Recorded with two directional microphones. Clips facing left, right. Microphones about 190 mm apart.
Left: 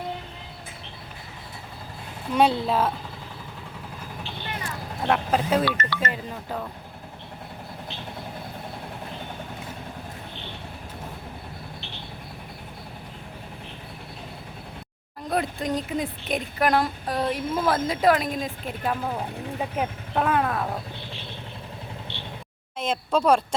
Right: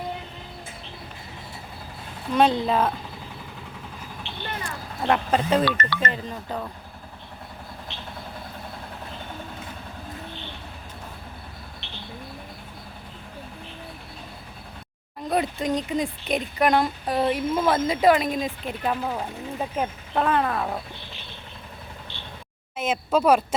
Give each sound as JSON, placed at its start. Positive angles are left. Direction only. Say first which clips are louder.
{"t": 2.3, "sound": "speech", "louder": "right 1 dB", "side_deg": 10}
{"t": 5.0, "sound": "speech", "louder": "right 1 dB", "side_deg": 5}
{"t": 15.3, "sound": "speech", "louder": "right 2 dB", "side_deg": 0}
{"t": 22.1, "sound": "vehicle", "louder": "left 4 dB", "side_deg": 65}
{"t": 22.8, "sound": "speech", "louder": "right 1 dB", "side_deg": -5}